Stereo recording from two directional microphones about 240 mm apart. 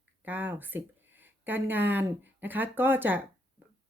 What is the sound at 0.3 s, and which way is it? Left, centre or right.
Speech, centre.